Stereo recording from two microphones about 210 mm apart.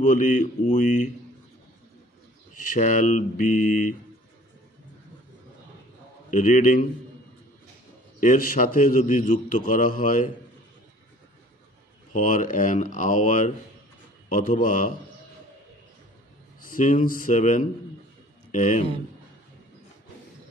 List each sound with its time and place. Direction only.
0.0 s a man's voice: 40° left (ahead or behind)
2.5 s a man's voice: 40° left (ahead or behind)
6.3 s a man's voice: 40° left (ahead or behind)
8.2 s a man's voice: 40° left (ahead or behind)
12.1 s a man's voice: 40° left (ahead or behind)
16.6 s a man's voice: 40° left (ahead or behind)